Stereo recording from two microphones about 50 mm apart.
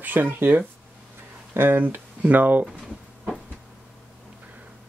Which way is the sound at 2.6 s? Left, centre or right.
Centre.